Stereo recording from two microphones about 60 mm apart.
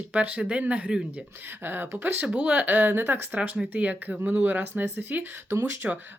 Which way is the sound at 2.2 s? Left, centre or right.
Right.